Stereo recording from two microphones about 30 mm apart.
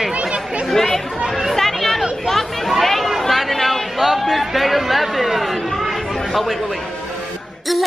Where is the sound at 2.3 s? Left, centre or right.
Centre.